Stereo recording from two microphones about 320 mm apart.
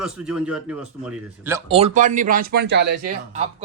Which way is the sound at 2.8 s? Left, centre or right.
Right.